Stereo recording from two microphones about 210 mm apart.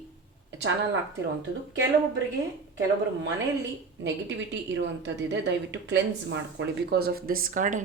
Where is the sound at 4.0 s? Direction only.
60° right (ahead or behind).